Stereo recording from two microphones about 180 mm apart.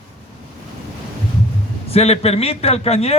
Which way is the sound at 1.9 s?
35° left (ahead or behind).